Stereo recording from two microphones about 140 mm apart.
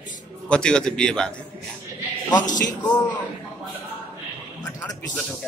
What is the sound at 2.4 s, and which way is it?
Speech, 65° left (ahead or behind).